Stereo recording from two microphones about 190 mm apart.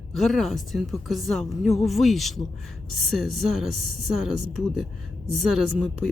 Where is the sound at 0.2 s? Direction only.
Centre (ahead or behind).